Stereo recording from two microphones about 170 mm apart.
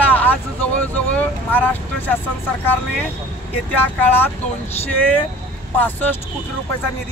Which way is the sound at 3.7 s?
10° left (ahead or behind).